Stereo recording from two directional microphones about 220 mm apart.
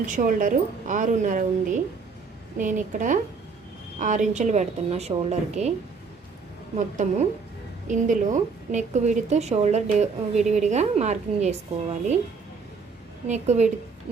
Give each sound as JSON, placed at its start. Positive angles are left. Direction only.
{"t": 0.0, "sound": "a woman's voice", "side_deg": -35}
{"t": 6.7, "sound": "a woman's voice", "side_deg": -35}
{"t": 13.2, "sound": "a woman's voice", "side_deg": -30}